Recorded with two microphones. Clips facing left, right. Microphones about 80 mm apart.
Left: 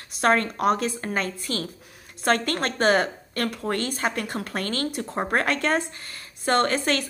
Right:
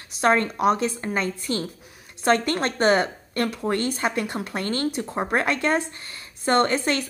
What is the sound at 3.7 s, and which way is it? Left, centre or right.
Speech, centre.